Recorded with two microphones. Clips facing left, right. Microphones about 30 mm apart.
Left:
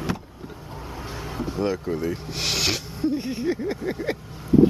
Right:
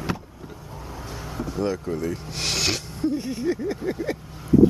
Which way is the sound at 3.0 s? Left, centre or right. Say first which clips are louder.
Even; centre.